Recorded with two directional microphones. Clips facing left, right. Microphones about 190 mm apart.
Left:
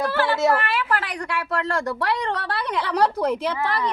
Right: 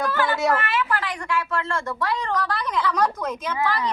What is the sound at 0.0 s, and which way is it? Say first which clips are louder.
A woman's voice: left 2 dB; 30° left (ahead or behind).